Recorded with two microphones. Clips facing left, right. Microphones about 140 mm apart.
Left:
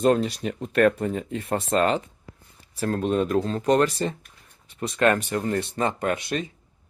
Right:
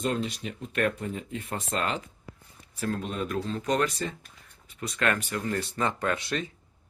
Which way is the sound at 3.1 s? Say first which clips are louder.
Left 8 dB; 35° left (ahead or behind).